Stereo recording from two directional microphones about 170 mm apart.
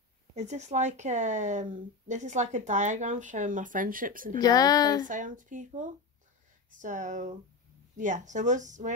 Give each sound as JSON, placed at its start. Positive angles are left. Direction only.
{"t": 0.4, "sound": "speech", "side_deg": -40}
{"t": 4.4, "sound": "speech", "side_deg": 20}
{"t": 5.0, "sound": "speech", "side_deg": -50}